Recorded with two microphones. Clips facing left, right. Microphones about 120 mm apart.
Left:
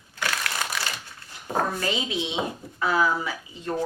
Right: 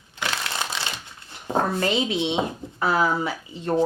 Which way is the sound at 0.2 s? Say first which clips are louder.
Right 1 dB; 20° right (ahead or behind).